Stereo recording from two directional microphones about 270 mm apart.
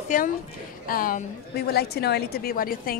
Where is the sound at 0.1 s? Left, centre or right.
Left.